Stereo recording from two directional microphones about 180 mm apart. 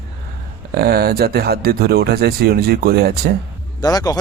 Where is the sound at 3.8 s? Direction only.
20° left (ahead or behind).